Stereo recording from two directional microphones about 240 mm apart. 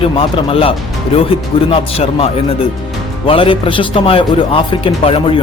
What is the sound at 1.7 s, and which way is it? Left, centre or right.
Speech, left.